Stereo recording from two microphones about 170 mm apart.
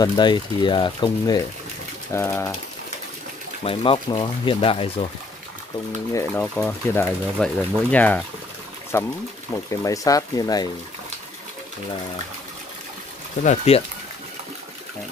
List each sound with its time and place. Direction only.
0.0 s speech: 25° left (ahead or behind)
3.6 s speech: 35° left (ahead or behind)
6.1 s speech: 10° left (ahead or behind)
13.4 s speech: 40° left (ahead or behind)